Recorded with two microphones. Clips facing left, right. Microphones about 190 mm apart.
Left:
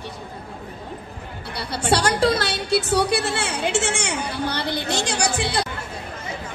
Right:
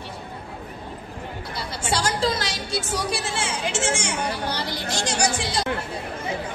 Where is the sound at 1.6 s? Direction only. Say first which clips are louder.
Left 5 dB; 65° left (ahead or behind).